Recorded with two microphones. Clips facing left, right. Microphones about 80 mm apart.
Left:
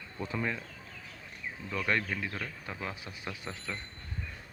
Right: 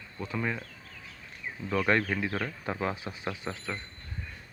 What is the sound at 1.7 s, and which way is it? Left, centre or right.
Speech, right.